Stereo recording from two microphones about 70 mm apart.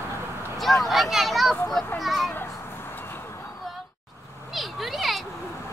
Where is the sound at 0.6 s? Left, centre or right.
Centre.